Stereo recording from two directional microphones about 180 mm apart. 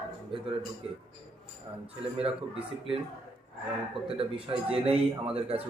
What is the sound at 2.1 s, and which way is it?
Speech, 35° right (ahead or behind).